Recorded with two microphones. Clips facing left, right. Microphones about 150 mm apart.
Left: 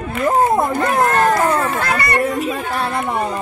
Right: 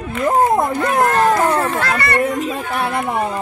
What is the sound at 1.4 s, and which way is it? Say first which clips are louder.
Speech: even; 30° right (ahead or behind).